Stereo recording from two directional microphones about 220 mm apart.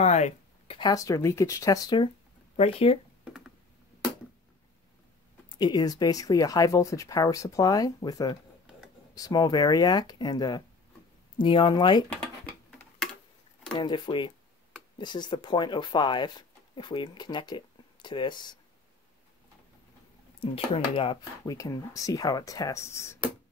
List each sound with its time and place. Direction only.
0.0 s speech: 30° left (ahead or behind)
5.6 s speech: 20° left (ahead or behind)
13.7 s speech: 20° left (ahead or behind)
20.3 s speech: 25° left (ahead or behind)